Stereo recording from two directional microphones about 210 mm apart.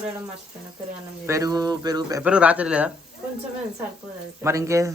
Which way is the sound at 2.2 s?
5° right (ahead or behind).